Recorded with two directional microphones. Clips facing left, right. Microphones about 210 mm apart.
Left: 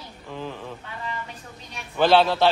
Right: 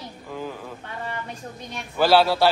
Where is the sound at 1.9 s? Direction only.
5° right (ahead or behind).